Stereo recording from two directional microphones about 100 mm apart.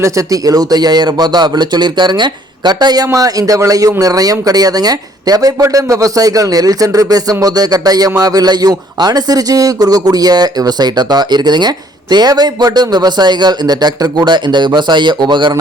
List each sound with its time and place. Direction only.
0.0 s a man's voice: 35° right (ahead or behind); by 15.5 s 50° right (ahead or behind)